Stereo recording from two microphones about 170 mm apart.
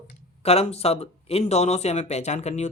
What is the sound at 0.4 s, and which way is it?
Speech, 35° left (ahead or behind).